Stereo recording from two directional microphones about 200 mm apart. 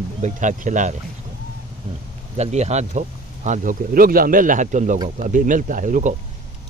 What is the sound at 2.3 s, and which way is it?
Speech, 35° right (ahead or behind).